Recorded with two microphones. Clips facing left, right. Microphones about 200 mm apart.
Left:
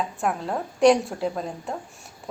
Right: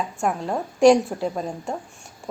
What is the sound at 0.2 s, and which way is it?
Speech, centre (ahead or behind).